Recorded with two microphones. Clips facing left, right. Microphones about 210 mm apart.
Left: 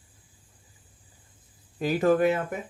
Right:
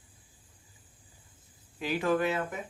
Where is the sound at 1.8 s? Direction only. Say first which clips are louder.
Left 6 dB; 45° left (ahead or behind).